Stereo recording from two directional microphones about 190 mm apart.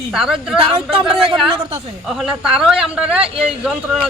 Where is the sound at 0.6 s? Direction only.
30° right (ahead or behind).